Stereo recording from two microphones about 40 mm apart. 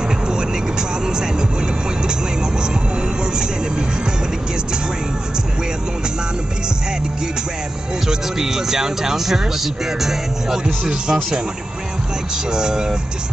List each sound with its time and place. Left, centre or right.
0.3 s vehicle: centre
8.1 s speech: centre
10.6 s speech: right
12.5 s speech: centre